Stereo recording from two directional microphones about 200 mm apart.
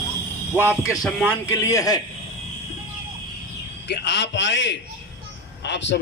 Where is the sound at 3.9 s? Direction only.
60° left (ahead or behind).